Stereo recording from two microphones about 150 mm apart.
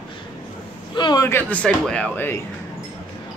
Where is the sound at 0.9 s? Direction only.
30° left (ahead or behind).